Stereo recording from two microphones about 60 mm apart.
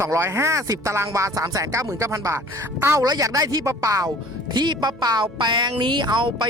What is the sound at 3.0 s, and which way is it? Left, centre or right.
Speech, right.